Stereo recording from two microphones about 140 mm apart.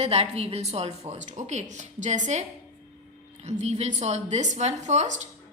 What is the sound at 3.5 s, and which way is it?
A woman's voice, 50° right (ahead or behind).